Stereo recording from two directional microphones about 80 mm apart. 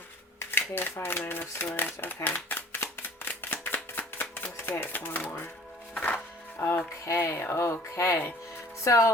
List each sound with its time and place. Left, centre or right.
0.3 s shuffling cards: left
5.9 s music: left
6.6 s speech: left